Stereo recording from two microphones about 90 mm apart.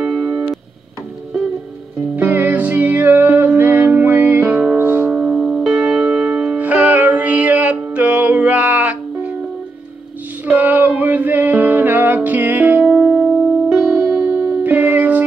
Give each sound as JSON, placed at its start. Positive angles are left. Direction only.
{"t": 0.0, "sound": "music", "side_deg": -5}
{"t": 2.1, "sound": "music", "side_deg": -20}
{"t": 5.1, "sound": "music", "side_deg": -10}
{"t": 6.6, "sound": "music", "side_deg": -15}
{"t": 10.4, "sound": "music", "side_deg": -20}
{"t": 13.7, "sound": "music", "side_deg": -5}
{"t": 14.1, "sound": "music", "side_deg": -15}